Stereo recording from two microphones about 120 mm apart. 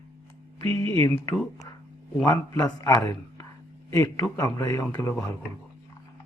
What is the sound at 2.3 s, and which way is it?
A man's voice, 35° left (ahead or behind).